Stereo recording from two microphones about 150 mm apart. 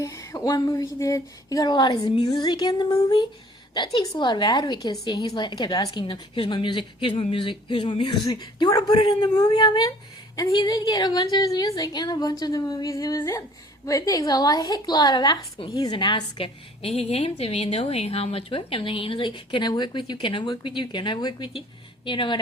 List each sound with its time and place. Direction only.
0.0 s a woman's voice: 20° left (ahead or behind)